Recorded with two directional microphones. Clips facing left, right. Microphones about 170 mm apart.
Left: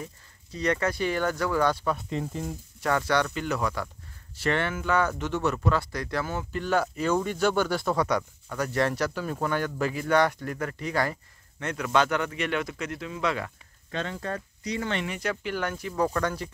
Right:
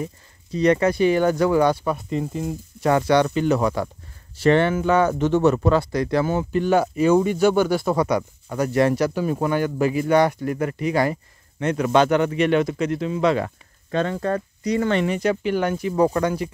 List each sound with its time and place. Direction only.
0.0 s speech: 20° right (ahead or behind)
2.0 s speech: centre (ahead or behind)
2.8 s speech: 20° right (ahead or behind)
13.9 s speech: 50° right (ahead or behind)
15.0 s speech: 20° right (ahead or behind)